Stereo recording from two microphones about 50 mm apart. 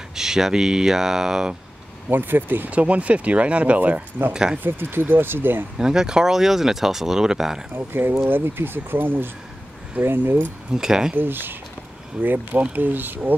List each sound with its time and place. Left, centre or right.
0.1 s speech: centre
2.0 s speech: right
2.7 s speech: right
4.3 s speech: centre
4.6 s speech: right
5.8 s speech: centre
7.7 s speech: right
10.7 s speech: centre
11.1 s speech: right